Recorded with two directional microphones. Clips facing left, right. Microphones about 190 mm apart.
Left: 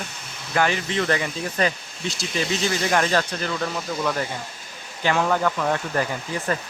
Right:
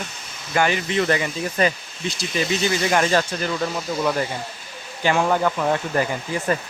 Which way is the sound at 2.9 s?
10° right (ahead or behind).